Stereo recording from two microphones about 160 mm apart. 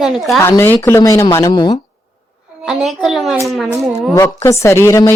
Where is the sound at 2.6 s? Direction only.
Centre (ahead or behind).